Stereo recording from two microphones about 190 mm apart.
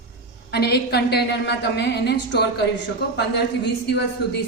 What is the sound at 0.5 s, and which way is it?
A woman's voice, 60° left (ahead or behind).